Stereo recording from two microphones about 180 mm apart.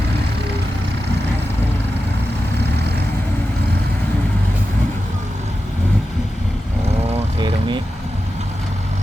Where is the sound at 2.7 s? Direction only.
65° right (ahead or behind).